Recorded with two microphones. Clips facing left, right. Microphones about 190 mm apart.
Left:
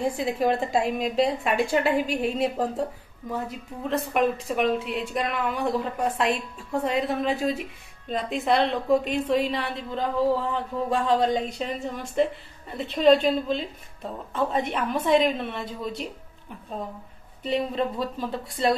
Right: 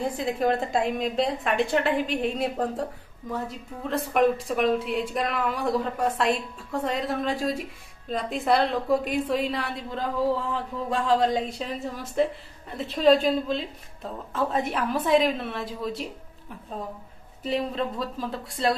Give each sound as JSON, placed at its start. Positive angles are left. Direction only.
{"t": 0.0, "sound": "a woman's voice", "side_deg": 0}
{"t": 3.9, "sound": "a woman's voice", "side_deg": 0}
{"t": 17.4, "sound": "a woman's voice", "side_deg": 0}